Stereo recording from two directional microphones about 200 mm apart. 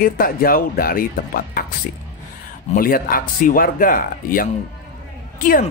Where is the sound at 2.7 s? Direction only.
45° left (ahead or behind).